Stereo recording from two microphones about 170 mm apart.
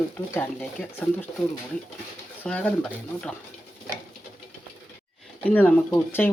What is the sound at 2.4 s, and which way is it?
Speech, 10° left (ahead or behind).